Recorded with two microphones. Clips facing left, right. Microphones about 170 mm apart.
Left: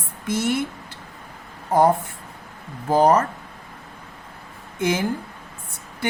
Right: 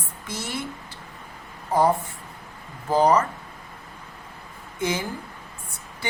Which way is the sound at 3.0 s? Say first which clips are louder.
Left 2 dB; 50° left (ahead or behind).